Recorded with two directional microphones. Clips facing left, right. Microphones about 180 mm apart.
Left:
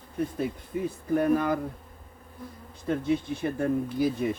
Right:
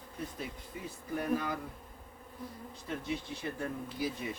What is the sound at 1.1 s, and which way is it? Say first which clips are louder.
Bee: left 9 dB; 55° left (ahead or behind).